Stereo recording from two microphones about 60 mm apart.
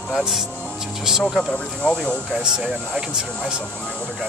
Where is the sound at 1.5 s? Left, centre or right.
Left.